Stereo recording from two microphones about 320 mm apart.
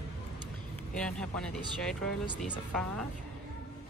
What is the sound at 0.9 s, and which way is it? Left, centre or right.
Speech, centre.